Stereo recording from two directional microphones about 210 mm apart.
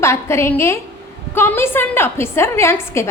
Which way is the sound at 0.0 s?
10° left (ahead or behind).